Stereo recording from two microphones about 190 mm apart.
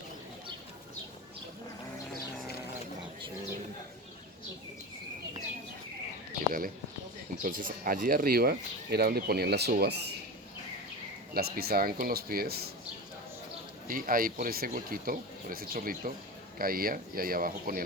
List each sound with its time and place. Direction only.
7.4 s speech: 45° right (ahead or behind)
11.3 s speech: 55° right (ahead or behind)
13.8 s speech: 50° right (ahead or behind)